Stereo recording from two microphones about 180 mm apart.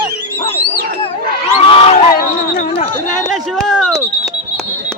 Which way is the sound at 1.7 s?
30° left (ahead or behind).